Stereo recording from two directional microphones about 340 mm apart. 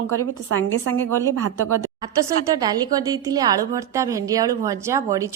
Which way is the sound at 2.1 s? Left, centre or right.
Centre.